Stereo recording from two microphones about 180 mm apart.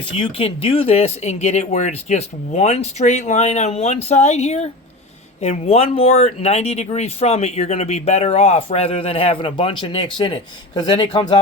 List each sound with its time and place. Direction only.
0.2 s speech: 30° left (ahead or behind)